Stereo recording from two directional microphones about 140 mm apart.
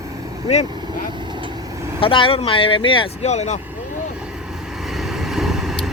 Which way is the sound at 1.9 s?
40° left (ahead or behind).